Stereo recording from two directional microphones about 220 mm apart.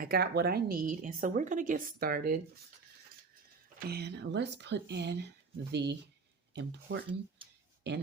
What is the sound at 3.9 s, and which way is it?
Speech, 50° right (ahead or behind).